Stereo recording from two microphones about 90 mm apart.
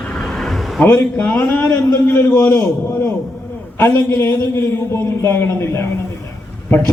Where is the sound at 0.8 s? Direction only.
20° left (ahead or behind).